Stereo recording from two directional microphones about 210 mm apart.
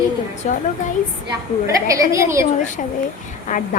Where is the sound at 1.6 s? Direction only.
15° right (ahead or behind).